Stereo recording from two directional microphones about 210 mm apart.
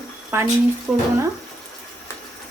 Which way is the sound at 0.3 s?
10° right (ahead or behind).